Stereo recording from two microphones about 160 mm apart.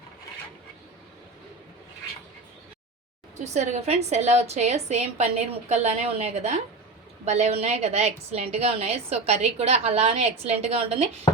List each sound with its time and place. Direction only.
3.3 s a woman's voice: 45° right (ahead or behind)